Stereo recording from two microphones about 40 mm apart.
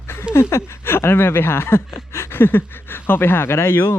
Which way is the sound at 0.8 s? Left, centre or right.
Left.